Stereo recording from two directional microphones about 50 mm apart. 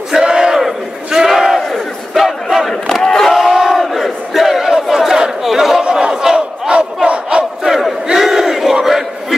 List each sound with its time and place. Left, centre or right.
0.1 s battle cry: centre
3.3 s battle cry: centre
5.9 s battle cry: centre
7.6 s crowd: centre